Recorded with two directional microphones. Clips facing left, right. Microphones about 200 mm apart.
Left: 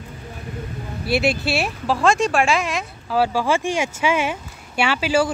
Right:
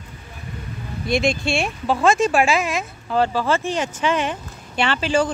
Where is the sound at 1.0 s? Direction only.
5° left (ahead or behind).